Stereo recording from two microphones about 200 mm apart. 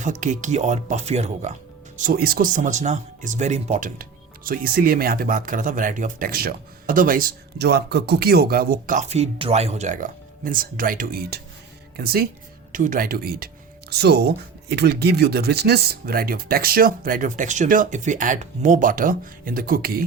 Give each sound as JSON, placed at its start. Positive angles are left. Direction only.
{"t": 0.0, "sound": "speech", "side_deg": -40}
{"t": 2.0, "sound": "speech", "side_deg": -50}